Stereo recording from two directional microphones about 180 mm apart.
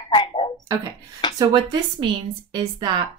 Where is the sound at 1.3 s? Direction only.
25° right (ahead or behind).